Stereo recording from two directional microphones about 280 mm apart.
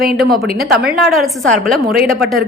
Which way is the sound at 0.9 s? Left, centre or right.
Centre.